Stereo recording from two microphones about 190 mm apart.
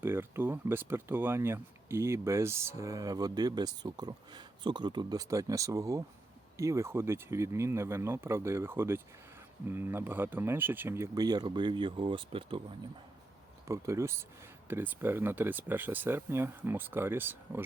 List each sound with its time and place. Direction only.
0.0 s speech: 10° right (ahead or behind)
13.7 s speech: 15° right (ahead or behind)